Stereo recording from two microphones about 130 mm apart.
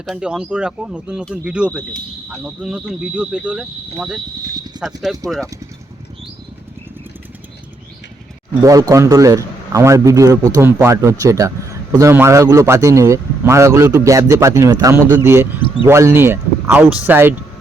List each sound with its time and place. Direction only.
0.0 s speech: 5° right (ahead or behind)
8.6 s speech: 25° right (ahead or behind)